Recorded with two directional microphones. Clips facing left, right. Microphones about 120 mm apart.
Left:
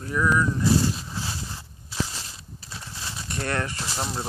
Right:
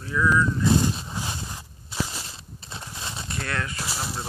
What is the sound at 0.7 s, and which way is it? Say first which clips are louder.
Walk: even; 20° right (ahead or behind).